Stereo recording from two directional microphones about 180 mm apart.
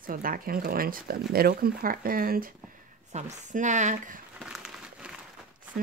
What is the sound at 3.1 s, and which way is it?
A woman's voice, 45° right (ahead or behind).